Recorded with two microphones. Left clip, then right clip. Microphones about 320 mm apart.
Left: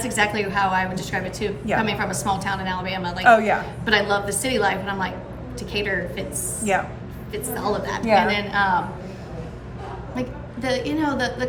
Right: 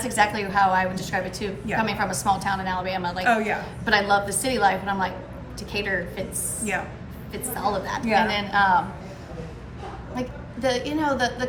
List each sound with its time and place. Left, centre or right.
0.0 s a woman's voice: centre
3.2 s a woman's voice: centre
3.8 s a woman's voice: centre
6.6 s a woman's voice: centre
7.3 s a woman's voice: centre
10.2 s a woman's voice: centre